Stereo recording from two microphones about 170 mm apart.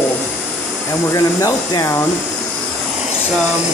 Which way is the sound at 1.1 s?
20° left (ahead or behind).